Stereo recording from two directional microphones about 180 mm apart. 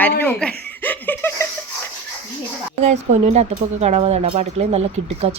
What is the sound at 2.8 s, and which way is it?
Speech, 40° right (ahead or behind).